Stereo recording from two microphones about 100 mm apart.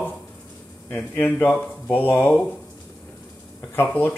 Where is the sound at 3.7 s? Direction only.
20° left (ahead or behind).